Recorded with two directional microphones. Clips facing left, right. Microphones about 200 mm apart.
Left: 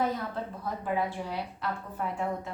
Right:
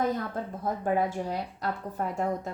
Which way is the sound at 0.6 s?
45° right (ahead or behind).